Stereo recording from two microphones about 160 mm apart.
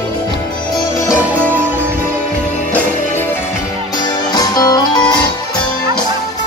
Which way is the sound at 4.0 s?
25° left (ahead or behind).